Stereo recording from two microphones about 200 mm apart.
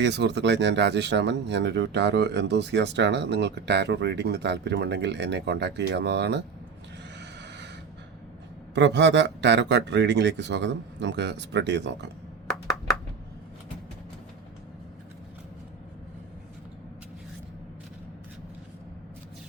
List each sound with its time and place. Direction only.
0.0 s speech: 60° right (ahead or behind)
8.7 s speech: 60° right (ahead or behind)